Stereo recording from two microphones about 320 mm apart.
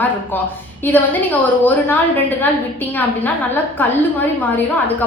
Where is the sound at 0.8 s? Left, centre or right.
Centre.